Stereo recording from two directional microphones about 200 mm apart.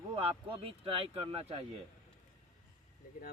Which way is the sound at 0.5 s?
25° right (ahead or behind).